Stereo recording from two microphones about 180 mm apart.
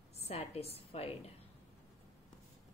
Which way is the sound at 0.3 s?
35° left (ahead or behind).